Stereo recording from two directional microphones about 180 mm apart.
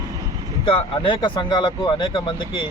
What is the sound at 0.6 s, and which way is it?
Speech, 30° left (ahead or behind).